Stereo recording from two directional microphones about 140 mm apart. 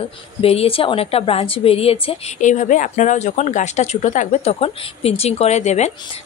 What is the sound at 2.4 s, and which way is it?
Speech, 60° left (ahead or behind).